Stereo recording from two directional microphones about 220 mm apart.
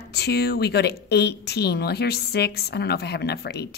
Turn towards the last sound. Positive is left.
turn(degrees=45)  # may be behind; listen again after turning